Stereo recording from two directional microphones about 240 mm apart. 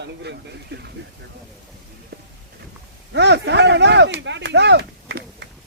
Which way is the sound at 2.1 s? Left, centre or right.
Right.